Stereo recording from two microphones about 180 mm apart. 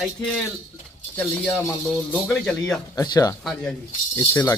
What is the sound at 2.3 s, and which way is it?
Speech, 5° left (ahead or behind).